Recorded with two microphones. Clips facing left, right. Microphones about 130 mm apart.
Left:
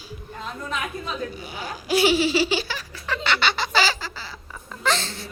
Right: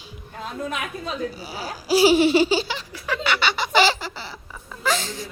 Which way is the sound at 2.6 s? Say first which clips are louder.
Right 2 dB; 15° right (ahead or behind).